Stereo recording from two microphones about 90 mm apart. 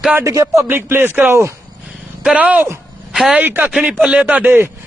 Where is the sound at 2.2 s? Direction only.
10° right (ahead or behind).